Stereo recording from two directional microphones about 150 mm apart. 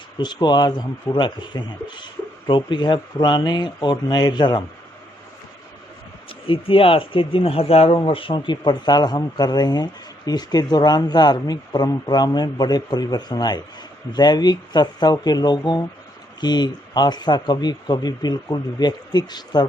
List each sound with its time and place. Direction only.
0.2 s speech: 30° left (ahead or behind)
6.2 s speech: 35° left (ahead or behind)